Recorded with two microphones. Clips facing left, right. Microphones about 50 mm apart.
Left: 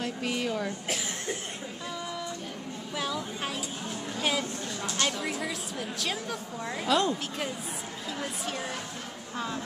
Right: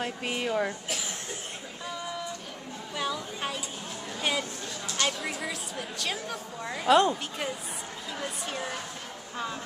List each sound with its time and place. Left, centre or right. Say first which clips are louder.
0.0 s speech: even; right
3.0 s a sound: right 1 dB; centre
5.0 s a woman's voice: right 1 dB; centre
6.9 s speech: right 5 dB; right